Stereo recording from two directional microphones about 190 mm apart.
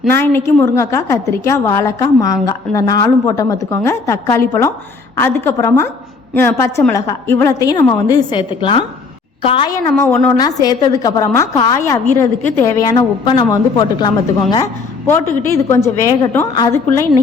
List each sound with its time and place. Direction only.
0.1 s a woman's voice: 10° left (ahead or behind); by 9.7 s 30° left (ahead or behind)
10.0 s a woman's voice: 15° left (ahead or behind)
12.5 s a woman's voice: 10° left (ahead or behind)